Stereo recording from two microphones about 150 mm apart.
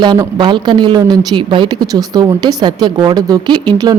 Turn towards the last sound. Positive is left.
turn(degrees=-30)  # may be behind; listen again after turning